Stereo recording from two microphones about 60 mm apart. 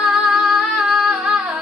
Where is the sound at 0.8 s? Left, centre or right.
Centre.